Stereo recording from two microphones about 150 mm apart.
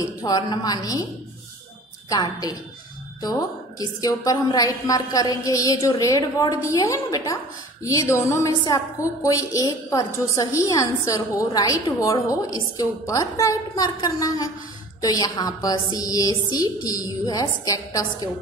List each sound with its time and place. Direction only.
0.2 s a woman's voice: 25° left (ahead or behind)
2.0 s a woman's voice: 25° left (ahead or behind)